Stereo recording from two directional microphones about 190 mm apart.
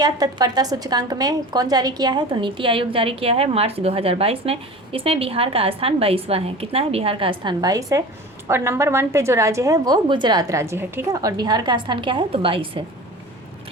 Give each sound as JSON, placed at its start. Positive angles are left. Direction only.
{"t": 0.0, "sound": "a woman's voice", "side_deg": -20}